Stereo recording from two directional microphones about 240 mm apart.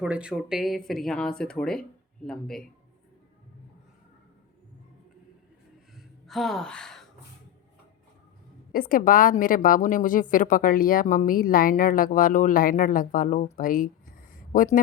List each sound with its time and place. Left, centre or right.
0.0 s speech: centre
6.0 s a woman's voice: centre
8.7 s a woman's voice: left